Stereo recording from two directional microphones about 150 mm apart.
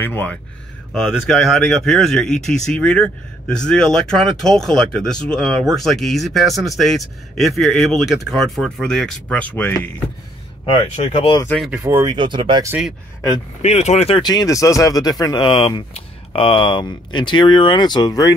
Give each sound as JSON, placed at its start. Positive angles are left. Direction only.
{"t": 0.0, "sound": "speech", "side_deg": 10}
{"t": 10.6, "sound": "speech", "side_deg": 35}
{"t": 11.4, "sound": "speech", "side_deg": 5}
{"t": 11.7, "sound": "speech", "side_deg": -15}
{"t": 13.6, "sound": "speech", "side_deg": 50}
{"t": 14.2, "sound": "speech", "side_deg": 25}